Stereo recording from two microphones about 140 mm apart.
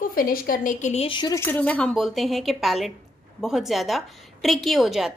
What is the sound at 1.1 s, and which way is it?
Speech, 30° left (ahead or behind).